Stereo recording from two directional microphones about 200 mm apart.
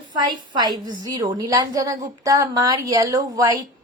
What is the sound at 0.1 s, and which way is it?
A woman's voice, 20° right (ahead or behind).